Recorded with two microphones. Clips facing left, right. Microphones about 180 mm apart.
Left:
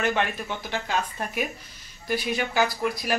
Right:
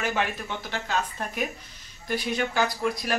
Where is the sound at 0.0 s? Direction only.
5° right (ahead or behind).